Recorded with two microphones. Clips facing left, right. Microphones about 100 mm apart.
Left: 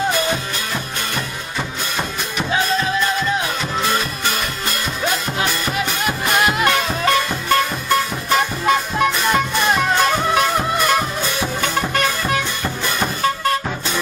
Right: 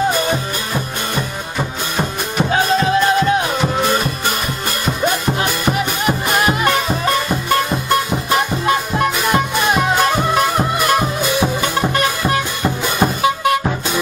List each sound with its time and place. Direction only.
0.1 s music: 15° right (ahead or behind)
2.3 s music: 45° right (ahead or behind)
4.8 s music: 10° right (ahead or behind)